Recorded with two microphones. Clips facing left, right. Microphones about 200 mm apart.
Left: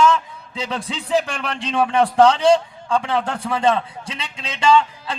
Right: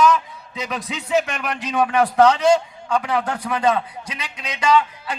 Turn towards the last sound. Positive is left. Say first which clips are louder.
# left 2 dB
turn(degrees=30)  # may be behind; listen again after turning